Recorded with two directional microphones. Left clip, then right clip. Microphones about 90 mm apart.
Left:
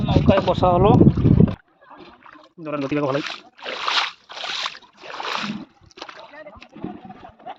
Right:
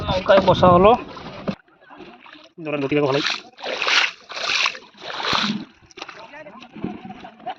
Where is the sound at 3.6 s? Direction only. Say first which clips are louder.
Right 2 dB; 50° right (ahead or behind).